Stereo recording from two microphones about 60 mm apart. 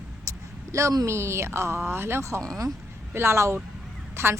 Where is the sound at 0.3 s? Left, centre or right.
Right.